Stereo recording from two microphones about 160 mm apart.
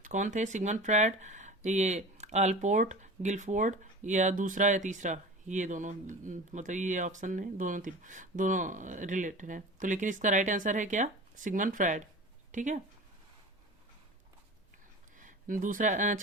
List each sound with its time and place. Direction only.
0.0 s speech: 50° right (ahead or behind)
15.2 s speech: 55° right (ahead or behind)